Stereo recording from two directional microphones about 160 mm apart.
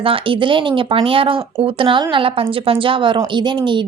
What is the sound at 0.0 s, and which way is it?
A woman's voice, 35° right (ahead or behind).